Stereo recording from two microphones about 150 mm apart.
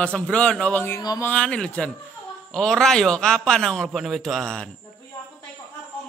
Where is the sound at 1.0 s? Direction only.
25° left (ahead or behind).